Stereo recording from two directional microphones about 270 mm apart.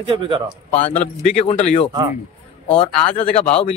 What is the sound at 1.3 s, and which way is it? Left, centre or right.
Speech, left.